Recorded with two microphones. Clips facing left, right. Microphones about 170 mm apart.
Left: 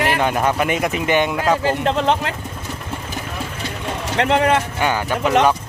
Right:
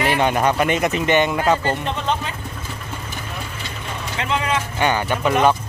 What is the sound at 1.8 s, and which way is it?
Speech, 90° left.